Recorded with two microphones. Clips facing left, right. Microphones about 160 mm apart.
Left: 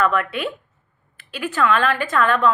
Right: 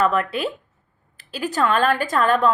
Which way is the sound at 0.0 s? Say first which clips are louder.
Even; 35° right (ahead or behind).